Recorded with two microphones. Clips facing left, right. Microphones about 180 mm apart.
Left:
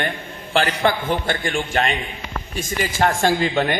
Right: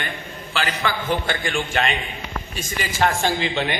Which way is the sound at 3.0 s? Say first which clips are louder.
Left 2 dB; 45° left (ahead or behind).